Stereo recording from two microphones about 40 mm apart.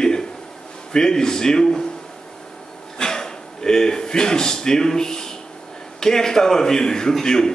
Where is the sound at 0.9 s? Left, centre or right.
Centre.